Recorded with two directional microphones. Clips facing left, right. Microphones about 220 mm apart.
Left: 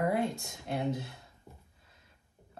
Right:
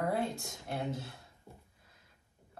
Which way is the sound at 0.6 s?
20° left (ahead or behind).